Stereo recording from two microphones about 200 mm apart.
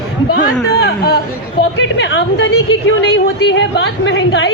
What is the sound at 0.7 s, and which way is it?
A woman's voice, 55° left (ahead or behind).